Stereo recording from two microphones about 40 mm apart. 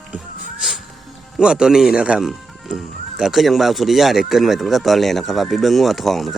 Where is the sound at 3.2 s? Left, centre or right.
Centre.